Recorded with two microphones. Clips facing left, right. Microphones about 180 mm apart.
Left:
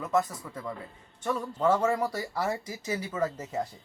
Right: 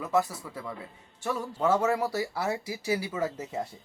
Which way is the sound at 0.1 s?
10° right (ahead or behind).